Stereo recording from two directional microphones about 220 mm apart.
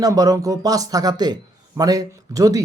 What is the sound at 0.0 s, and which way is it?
A man's voice, 15° right (ahead or behind).